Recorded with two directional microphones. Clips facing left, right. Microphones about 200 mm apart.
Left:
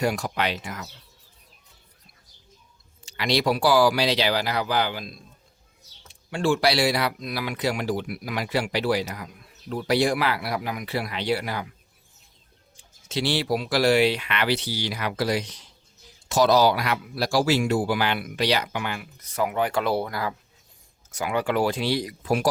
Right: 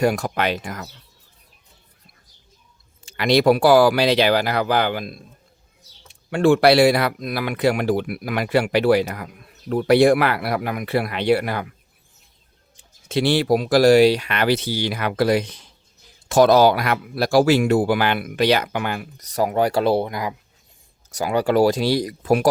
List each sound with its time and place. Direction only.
0.0 s speech: 50° right (ahead or behind)
3.1 s speech: 55° right (ahead or behind)
6.3 s speech: 60° right (ahead or behind)
13.1 s speech: 55° right (ahead or behind); by 20.3 s 20° right (ahead or behind)
21.1 s speech: 35° right (ahead or behind)